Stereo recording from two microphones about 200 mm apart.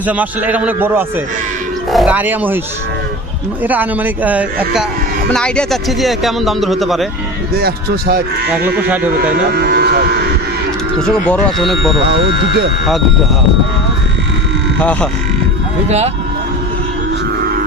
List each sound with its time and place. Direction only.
0.1 s a man's voice: 10° right (ahead or behind)
3.6 s a man's voice: 10° right (ahead or behind)
7.5 s speech: 50° right (ahead or behind)
9.3 s speech: 50° right (ahead or behind)
11.1 s a man's voice: centre (ahead or behind)